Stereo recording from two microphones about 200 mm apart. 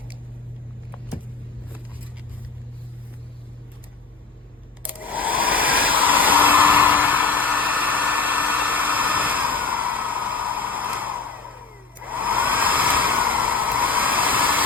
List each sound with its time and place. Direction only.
4.9 s hair dryer: 10° right (ahead or behind)
10.6 s a sound: 10° right (ahead or behind)
12.0 s hair dryer: 10° right (ahead or behind)